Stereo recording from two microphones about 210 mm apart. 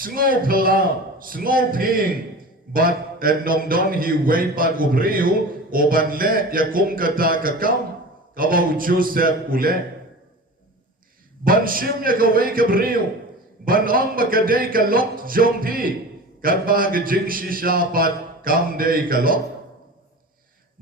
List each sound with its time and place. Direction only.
0.0 s a man's voice: 40° right (ahead or behind)
11.4 s a man's voice: 40° right (ahead or behind)